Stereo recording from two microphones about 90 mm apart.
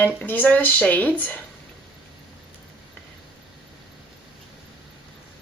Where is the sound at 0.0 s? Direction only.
20° left (ahead or behind).